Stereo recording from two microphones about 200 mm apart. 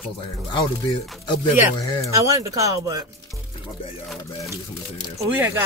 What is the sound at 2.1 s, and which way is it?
Speech, 15° right (ahead or behind).